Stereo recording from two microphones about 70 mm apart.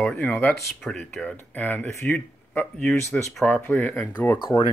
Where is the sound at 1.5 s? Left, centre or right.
Left.